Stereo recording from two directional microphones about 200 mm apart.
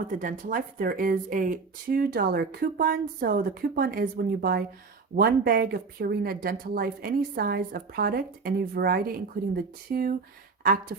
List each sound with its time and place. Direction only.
0.2 s a woman's voice: 40° right (ahead or behind)